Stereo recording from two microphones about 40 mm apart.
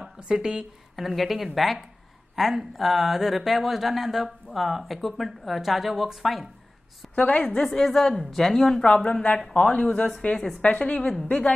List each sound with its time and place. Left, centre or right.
0.3 s speech: right
0.9 s speech: centre
7.2 s a woman's voice: left
7.4 s a woman's voice: centre
8.8 s a woman's voice: left